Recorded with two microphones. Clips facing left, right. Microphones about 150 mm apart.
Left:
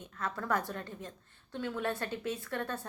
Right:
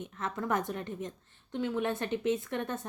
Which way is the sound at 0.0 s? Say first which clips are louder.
Right 3 dB; 20° right (ahead or behind).